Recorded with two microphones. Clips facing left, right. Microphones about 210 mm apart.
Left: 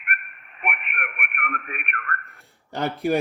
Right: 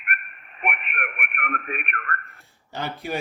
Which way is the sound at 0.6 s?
30° right (ahead or behind).